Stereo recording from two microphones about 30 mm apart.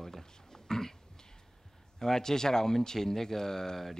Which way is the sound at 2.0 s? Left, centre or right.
Centre.